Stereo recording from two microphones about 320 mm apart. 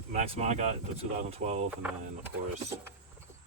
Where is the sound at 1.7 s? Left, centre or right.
Centre.